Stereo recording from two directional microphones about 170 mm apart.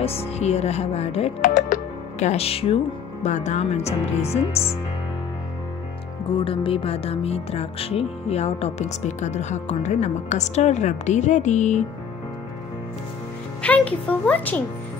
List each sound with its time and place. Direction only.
0.0 s speech: 35° left (ahead or behind)
6.3 s speech: 30° left (ahead or behind)
13.6 s speech: 5° left (ahead or behind)